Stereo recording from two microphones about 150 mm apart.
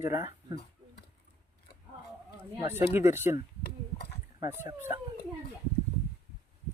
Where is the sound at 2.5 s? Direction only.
15° right (ahead or behind).